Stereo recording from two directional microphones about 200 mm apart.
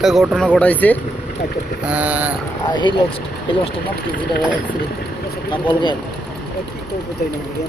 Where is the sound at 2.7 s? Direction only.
25° left (ahead or behind).